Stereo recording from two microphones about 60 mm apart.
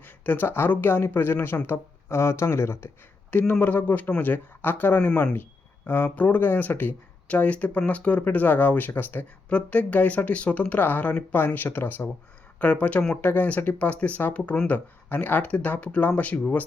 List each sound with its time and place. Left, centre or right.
0.0 s speech: left
3.6 s speech: left
12.5 s speech: left